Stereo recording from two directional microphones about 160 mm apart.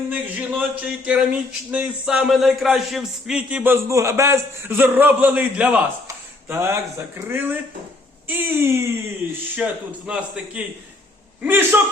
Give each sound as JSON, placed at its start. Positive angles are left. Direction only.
{"t": 0.1, "sound": "speech", "side_deg": -10}
{"t": 6.1, "sound": "a sound", "side_deg": -15}
{"t": 7.3, "sound": "speech", "side_deg": -10}
{"t": 11.7, "sound": "speech", "side_deg": -10}